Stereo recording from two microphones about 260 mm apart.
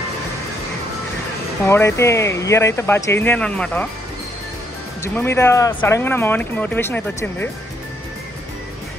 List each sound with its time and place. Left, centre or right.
1.7 s speech: centre
5.0 s speech: centre